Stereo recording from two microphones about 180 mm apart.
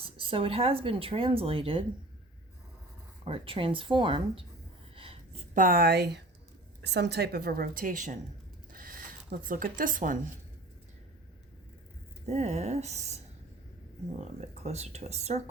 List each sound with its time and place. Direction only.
0.2 s speech: 30° right (ahead or behind)
3.2 s speech: 30° right (ahead or behind)
4.9 s a sound: 30° right (ahead or behind)
5.5 s a woman's voice: 55° right (ahead or behind)
8.7 s zipper: 50° right (ahead or behind)
12.2 s speech: 35° right (ahead or behind)
14.2 s speech: 35° right (ahead or behind)